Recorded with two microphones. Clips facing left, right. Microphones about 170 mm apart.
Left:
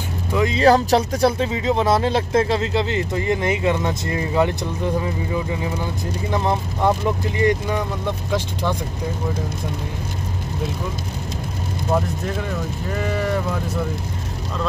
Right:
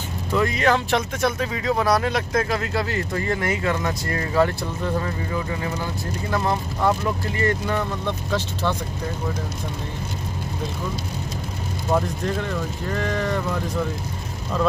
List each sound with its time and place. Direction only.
0.3 s speech: 15° left (ahead or behind)
0.6 s speech: 35° left (ahead or behind); by 8.7 s 15° left (ahead or behind)
11.9 s speech: 5° left (ahead or behind)